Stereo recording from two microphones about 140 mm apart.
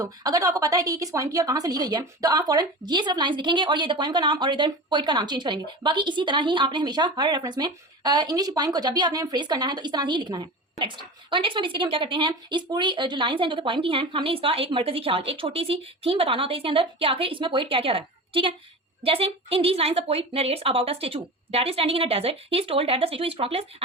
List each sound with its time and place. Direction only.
0.0 s a woman's voice: 25° right (ahead or behind); by 23.6 s 45° right (ahead or behind)